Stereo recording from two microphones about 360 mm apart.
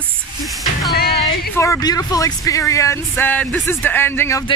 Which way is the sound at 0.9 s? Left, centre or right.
Left.